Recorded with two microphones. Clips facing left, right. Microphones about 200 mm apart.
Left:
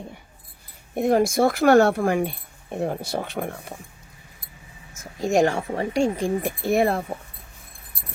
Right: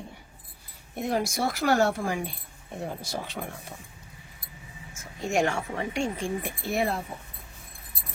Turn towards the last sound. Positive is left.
turn(degrees=55)  # may be behind; listen again after turning